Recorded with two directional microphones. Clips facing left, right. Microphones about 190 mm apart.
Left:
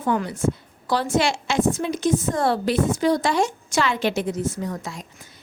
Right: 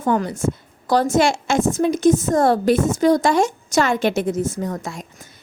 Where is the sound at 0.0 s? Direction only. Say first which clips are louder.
Right 3 dB; 45° right (ahead or behind).